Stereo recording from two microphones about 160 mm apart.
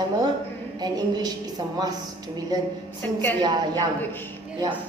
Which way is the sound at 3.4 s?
25° right (ahead or behind).